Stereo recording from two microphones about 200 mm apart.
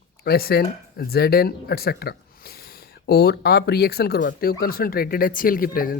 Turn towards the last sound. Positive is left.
turn(degrees=45)  # may be behind; listen again after turning